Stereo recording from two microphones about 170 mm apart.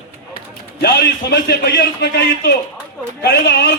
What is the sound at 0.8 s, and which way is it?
A man's voice, 80° left.